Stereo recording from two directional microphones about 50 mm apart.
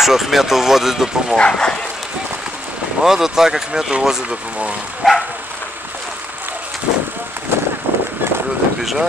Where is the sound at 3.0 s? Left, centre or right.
Centre.